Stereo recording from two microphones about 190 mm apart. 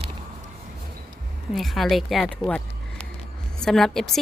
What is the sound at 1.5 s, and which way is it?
Speech, centre (ahead or behind).